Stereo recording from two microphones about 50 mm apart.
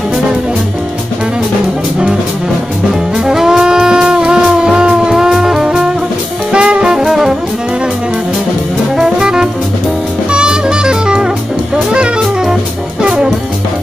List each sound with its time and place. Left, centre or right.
3.3 s music: centre
6.5 s jazz: centre
7.1 s music: centre
8.9 s jazz: centre
10.3 s music: centre